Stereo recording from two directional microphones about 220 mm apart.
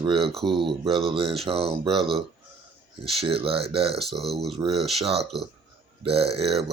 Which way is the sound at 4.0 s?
Centre (ahead or behind).